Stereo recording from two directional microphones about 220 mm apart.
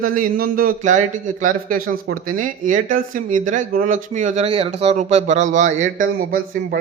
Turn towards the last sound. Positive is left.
turn(degrees=-40)  # may be behind; listen again after turning